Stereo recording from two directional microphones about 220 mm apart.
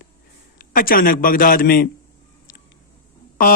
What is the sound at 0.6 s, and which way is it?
A man's voice, 40° left (ahead or behind).